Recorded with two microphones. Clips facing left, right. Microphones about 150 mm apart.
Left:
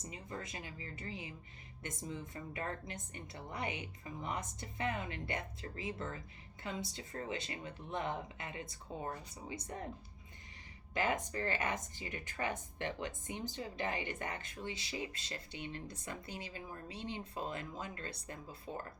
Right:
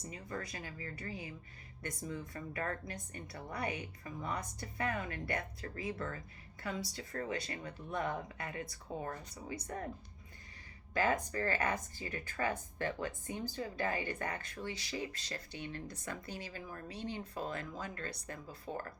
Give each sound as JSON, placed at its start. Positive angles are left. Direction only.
{"t": 0.0, "sound": "a woman's voice", "side_deg": 20}
{"t": 10.9, "sound": "a woman's voice", "side_deg": 20}